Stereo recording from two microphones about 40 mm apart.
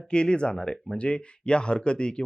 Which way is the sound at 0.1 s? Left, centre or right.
Left.